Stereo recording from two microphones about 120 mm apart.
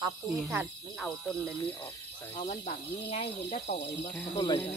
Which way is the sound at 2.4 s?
80° left.